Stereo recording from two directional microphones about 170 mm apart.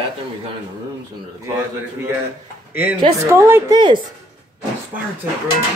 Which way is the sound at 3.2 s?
15° right (ahead or behind).